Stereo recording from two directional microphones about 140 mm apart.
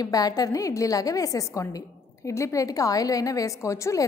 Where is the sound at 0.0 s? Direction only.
25° left (ahead or behind).